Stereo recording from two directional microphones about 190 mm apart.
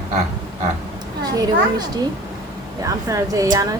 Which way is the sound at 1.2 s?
20° right (ahead or behind).